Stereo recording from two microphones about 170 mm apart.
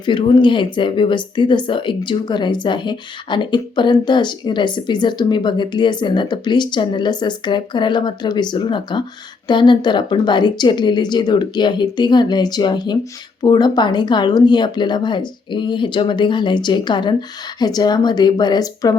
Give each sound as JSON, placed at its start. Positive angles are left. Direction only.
{"t": 0.0, "sound": "speech", "side_deg": 25}